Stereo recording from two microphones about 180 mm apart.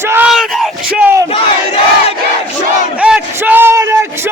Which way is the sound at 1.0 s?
10° right (ahead or behind).